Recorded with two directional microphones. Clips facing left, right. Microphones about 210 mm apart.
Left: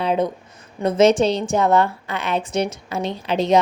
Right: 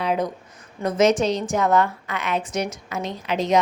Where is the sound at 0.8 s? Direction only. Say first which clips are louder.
Left 4 dB; 30° left (ahead or behind).